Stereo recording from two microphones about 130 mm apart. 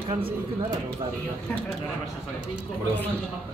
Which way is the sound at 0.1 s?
45° right (ahead or behind).